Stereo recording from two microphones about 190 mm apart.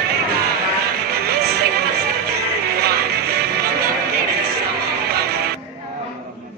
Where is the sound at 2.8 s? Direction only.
55° right (ahead or behind).